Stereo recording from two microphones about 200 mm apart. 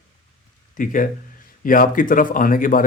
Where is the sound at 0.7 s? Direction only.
40° left (ahead or behind).